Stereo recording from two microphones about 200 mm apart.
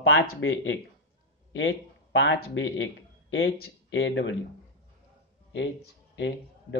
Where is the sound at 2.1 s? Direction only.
65° left (ahead or behind).